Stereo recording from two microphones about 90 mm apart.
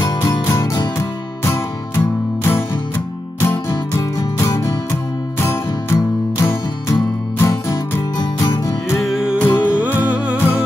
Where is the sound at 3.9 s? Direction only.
35° left (ahead or behind).